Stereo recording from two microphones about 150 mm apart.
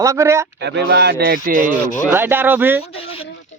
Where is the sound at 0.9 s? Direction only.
90° right.